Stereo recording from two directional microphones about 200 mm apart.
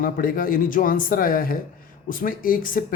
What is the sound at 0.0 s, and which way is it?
Speech, 45° left (ahead or behind).